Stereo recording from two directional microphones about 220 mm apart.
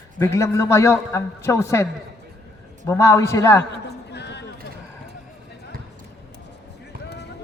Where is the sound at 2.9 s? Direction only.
10° left (ahead or behind).